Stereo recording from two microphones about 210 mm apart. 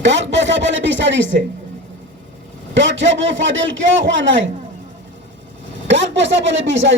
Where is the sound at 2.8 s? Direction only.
60° right (ahead or behind).